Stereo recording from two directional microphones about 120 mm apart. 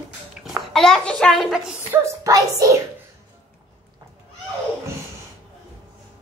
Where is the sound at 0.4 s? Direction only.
Centre (ahead or behind).